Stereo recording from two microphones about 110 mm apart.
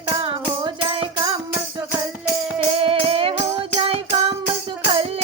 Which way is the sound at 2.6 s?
60° right (ahead or behind).